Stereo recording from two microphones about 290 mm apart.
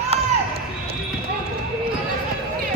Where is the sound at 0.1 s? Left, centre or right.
Right.